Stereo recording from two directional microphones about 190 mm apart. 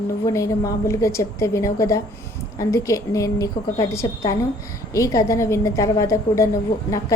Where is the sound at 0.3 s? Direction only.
15° left (ahead or behind).